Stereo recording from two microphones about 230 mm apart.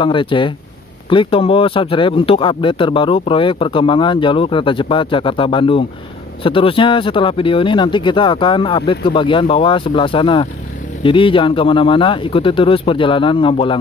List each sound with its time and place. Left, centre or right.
0.0 s speech: left